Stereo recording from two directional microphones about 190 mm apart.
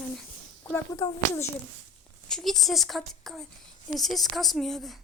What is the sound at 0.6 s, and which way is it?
Speech, 15° left (ahead or behind).